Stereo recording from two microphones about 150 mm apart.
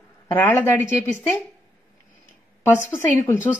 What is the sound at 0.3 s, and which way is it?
Speech, 10° left (ahead or behind).